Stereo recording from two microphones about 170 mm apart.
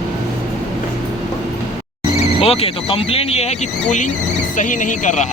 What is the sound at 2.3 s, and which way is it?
Speech, 35° left (ahead or behind).